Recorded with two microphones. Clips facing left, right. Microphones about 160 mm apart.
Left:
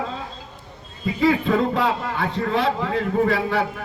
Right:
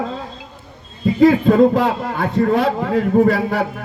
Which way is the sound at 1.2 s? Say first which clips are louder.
Right 8 dB; 45° right (ahead or behind).